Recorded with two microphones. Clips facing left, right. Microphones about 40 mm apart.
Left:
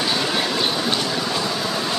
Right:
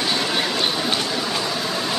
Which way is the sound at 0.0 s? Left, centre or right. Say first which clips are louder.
Even; centre.